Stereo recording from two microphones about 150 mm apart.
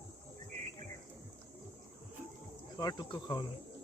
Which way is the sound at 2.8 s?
25° left (ahead or behind).